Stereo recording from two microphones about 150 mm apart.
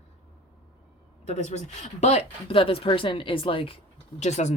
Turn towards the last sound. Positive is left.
turn(degrees=50)  # may be behind; listen again after turning